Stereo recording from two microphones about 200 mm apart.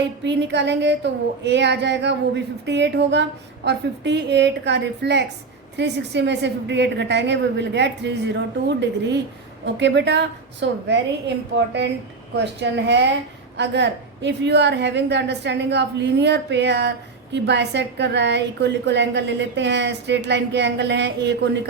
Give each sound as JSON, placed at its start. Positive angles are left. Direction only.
{"t": 0.3, "sound": "a woman's voice", "side_deg": -60}
{"t": 12.5, "sound": "a woman's voice", "side_deg": -60}